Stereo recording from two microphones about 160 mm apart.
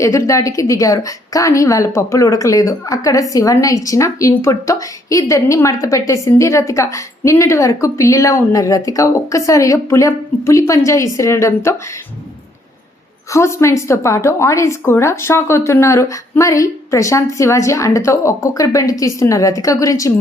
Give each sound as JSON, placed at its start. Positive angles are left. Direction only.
{"t": 0.0, "sound": "a woman's voice", "side_deg": 20}
{"t": 13.3, "sound": "a woman's voice", "side_deg": 15}